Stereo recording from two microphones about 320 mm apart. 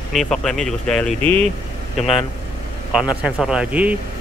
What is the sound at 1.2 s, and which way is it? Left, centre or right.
Speech, centre.